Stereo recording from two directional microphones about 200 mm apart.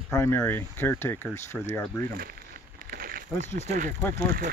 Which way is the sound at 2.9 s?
45° right (ahead or behind).